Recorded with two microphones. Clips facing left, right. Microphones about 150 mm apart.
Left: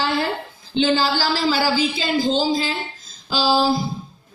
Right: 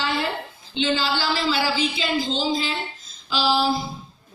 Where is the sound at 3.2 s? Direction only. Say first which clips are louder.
Left 3 dB; 40° left (ahead or behind).